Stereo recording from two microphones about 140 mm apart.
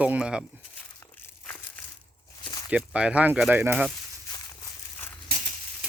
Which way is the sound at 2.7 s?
10° right (ahead or behind).